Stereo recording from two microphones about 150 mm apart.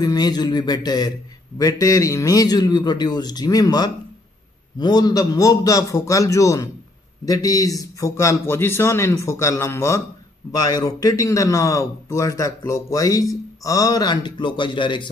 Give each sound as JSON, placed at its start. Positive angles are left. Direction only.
{"t": 0.0, "sound": "a man's voice", "side_deg": 25}